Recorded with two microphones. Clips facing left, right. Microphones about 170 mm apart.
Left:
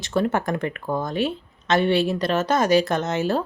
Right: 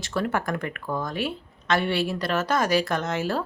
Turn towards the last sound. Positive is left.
turn(degrees=20)  # may be behind; listen again after turning